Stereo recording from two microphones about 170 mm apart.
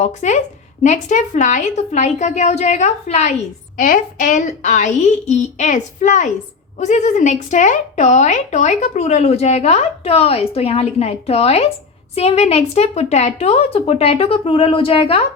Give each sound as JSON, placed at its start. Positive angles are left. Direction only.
{"t": 0.0, "sound": "a woman's voice", "side_deg": 45}